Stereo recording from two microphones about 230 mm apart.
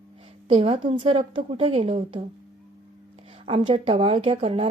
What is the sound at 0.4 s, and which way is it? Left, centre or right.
A woman's voice, right.